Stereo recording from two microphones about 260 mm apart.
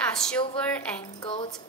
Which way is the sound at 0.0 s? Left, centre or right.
Centre.